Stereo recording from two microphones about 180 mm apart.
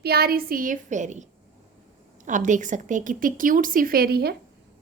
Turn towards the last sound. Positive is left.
turn(degrees=-60)  # may be behind; listen again after turning